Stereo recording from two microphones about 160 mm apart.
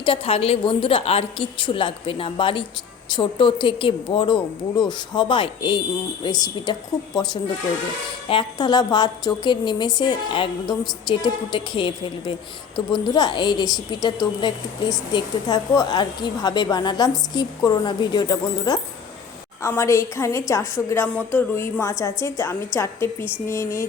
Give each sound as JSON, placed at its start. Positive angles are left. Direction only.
{"t": 0.0, "sound": "a woman's voice", "side_deg": 35}
{"t": 8.3, "sound": "a woman's voice", "side_deg": 30}